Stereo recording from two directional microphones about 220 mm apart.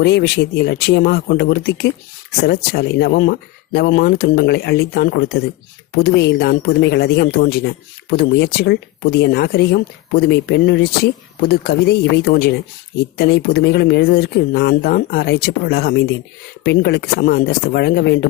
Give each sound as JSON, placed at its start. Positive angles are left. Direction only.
{"t": 0.0, "sound": "speech", "side_deg": 45}